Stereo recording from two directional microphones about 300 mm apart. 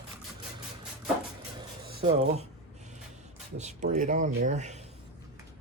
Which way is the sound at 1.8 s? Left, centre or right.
Right.